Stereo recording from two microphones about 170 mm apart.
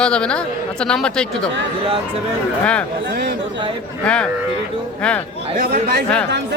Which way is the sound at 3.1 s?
65° right (ahead or behind).